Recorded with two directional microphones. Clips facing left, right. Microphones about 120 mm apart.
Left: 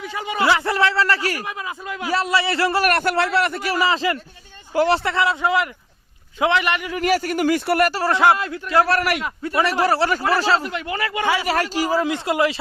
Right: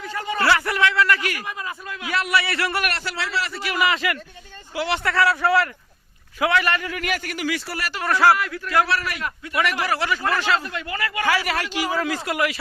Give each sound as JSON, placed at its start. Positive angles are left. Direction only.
{"t": 0.0, "sound": "a man's voice", "side_deg": 10}
{"t": 0.7, "sound": "a man's voice", "side_deg": 30}
{"t": 1.5, "sound": "a man's voice", "side_deg": 15}
{"t": 2.9, "sound": "a man's voice", "side_deg": 55}
{"t": 3.7, "sound": "a man's voice", "side_deg": 30}
{"t": 4.7, "sound": "speech", "side_deg": 40}
{"t": 5.0, "sound": "a man's voice", "side_deg": 20}
{"t": 6.9, "sound": "speech", "side_deg": 40}
{"t": 7.9, "sound": "a man's voice", "side_deg": 30}
{"t": 8.9, "sound": "a man's voice", "side_deg": 60}
{"t": 9.4, "sound": "a man's voice", "side_deg": 35}
{"t": 10.6, "sound": "a man's voice", "side_deg": 20}
{"t": 11.5, "sound": "a man's voice", "side_deg": 40}
{"t": 11.9, "sound": "a man's voice", "side_deg": 25}